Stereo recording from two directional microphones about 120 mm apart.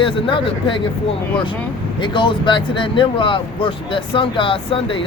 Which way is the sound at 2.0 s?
40° left (ahead or behind).